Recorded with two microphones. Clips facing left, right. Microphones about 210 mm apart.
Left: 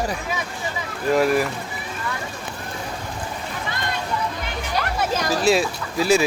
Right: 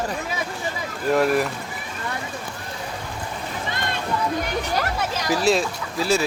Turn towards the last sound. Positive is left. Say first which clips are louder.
# left 3 dB
turn(degrees=10)  # may be behind; listen again after turning